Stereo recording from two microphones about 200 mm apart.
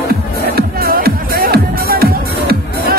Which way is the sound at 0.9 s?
45° right (ahead or behind).